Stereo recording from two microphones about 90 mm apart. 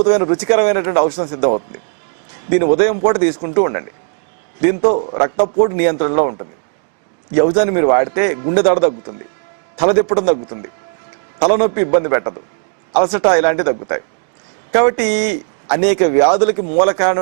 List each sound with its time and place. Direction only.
0.0 s a man's voice: 15° right (ahead or behind)